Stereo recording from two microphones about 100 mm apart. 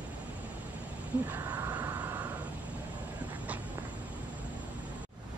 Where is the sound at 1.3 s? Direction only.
20° right (ahead or behind).